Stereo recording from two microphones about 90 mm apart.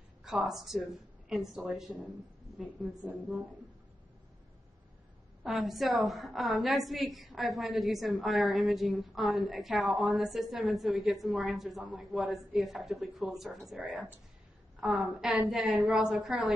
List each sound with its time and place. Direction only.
0.2 s a woman's voice: 5° right (ahead or behind)
5.4 s a woman's voice: centre (ahead or behind)
13.7 s a woman's voice: 15° right (ahead or behind)